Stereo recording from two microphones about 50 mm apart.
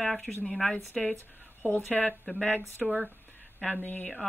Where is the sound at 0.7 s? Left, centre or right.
Left.